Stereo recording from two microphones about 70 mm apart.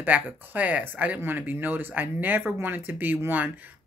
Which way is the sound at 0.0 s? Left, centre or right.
Right.